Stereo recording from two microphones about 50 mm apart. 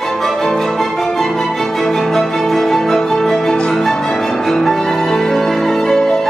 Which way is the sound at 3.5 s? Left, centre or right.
Centre.